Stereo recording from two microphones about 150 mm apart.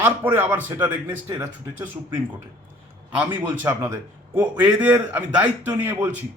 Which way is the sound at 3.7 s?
20° right (ahead or behind).